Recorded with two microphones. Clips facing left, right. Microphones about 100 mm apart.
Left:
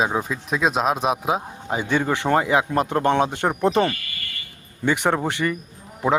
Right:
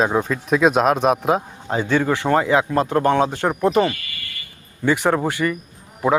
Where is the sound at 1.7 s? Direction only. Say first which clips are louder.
Right 3 dB; 15° left (ahead or behind).